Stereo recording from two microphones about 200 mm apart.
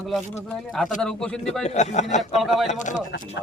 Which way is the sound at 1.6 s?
35° left (ahead or behind).